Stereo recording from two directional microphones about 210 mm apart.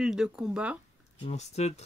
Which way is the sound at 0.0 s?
5° right (ahead or behind).